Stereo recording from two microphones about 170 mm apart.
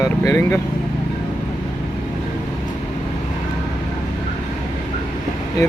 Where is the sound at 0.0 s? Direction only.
20° left (ahead or behind).